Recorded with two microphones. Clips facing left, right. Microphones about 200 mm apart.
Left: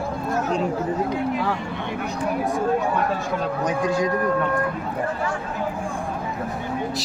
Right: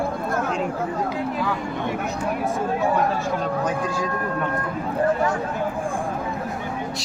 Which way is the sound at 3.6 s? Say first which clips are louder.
Left 3 dB; 20° left (ahead or behind).